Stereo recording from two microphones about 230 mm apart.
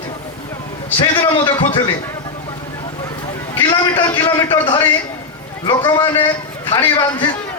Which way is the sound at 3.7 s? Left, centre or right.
Centre.